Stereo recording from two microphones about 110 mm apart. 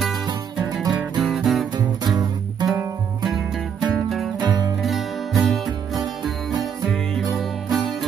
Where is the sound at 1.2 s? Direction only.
Centre (ahead or behind).